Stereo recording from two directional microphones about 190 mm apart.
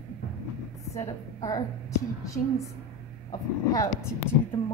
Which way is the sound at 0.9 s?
15° left (ahead or behind).